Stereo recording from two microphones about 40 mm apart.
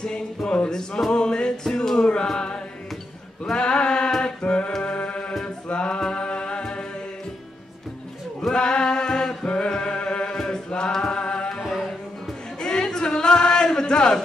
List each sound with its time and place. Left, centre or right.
0.0 s music: left
8.5 s music: left
9.7 s a sound: left
10.3 s mantra: centre
11.1 s music: left
11.6 s music: centre
12.5 s a sound: centre